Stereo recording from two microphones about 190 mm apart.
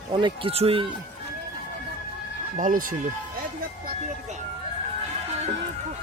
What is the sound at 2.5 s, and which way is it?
Speech, 45° right (ahead or behind).